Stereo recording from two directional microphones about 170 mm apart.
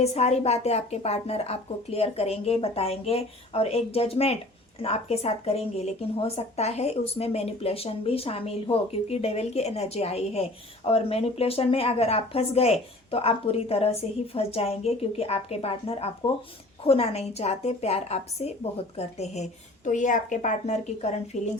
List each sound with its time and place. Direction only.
0.0 s a woman's voice: 40° left (ahead or behind)